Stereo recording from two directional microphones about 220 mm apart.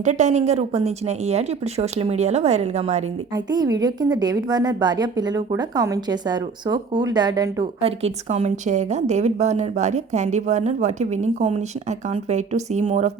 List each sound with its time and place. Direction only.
0.0 s a woman's voice: 35° right (ahead or behind)
3.3 s a woman's voice: 15° right (ahead or behind)